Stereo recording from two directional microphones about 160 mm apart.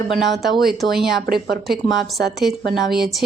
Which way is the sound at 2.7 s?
Centre (ahead or behind).